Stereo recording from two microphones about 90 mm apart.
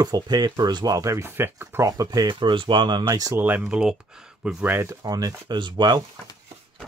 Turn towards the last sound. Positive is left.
turn(degrees=-50)  # may be behind; listen again after turning